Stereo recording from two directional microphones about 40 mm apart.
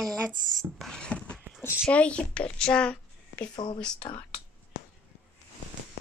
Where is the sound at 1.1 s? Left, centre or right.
Left.